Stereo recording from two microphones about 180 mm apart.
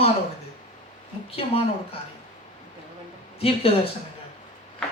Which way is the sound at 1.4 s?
30° left (ahead or behind).